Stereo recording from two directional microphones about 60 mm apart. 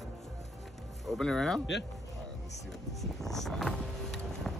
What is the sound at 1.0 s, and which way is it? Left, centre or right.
Speech, centre.